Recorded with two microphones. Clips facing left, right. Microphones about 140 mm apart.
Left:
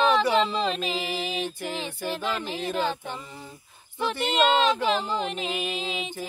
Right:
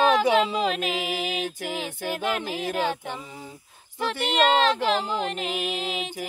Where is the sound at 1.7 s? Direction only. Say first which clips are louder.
Right 1 dB; 10° right (ahead or behind).